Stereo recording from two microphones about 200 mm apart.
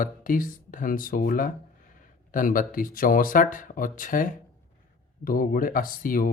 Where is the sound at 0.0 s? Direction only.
45° left (ahead or behind).